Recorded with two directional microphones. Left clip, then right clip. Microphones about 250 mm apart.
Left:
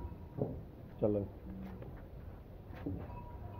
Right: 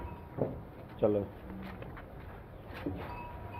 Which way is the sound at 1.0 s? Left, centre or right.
Centre.